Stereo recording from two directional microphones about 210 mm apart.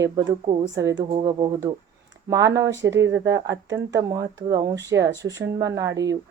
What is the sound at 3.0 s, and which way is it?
Speech, 60° right (ahead or behind).